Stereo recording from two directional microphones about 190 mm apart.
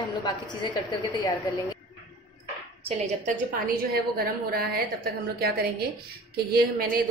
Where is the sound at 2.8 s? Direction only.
45° right (ahead or behind).